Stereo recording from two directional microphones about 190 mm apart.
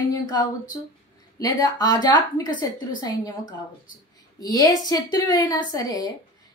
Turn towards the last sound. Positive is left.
turn(degrees=20)  # may be behind; listen again after turning